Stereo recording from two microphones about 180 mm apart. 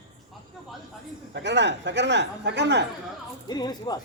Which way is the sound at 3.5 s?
20° left (ahead or behind).